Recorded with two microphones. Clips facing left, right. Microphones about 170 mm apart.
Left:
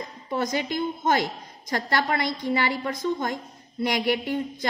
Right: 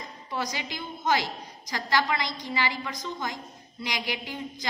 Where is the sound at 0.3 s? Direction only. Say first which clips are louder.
Left 7 dB; 50° left (ahead or behind).